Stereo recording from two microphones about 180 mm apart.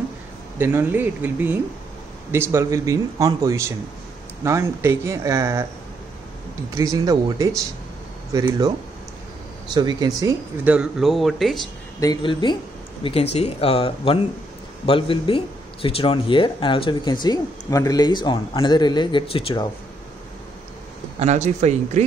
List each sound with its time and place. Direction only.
0.6 s speech: 10° right (ahead or behind)
6.7 s speech: 15° right (ahead or behind)
9.8 s speech: 20° right (ahead or behind)
10.6 s speech: 5° right (ahead or behind)
12.0 s speech: 25° left (ahead or behind)
21.2 s speech: 40° right (ahead or behind)